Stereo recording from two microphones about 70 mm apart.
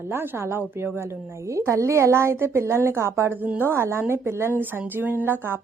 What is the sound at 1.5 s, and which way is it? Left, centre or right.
A woman's voice, right.